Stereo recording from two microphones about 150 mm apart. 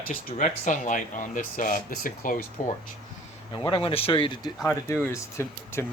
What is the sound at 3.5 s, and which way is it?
Speech, 35° left (ahead or behind).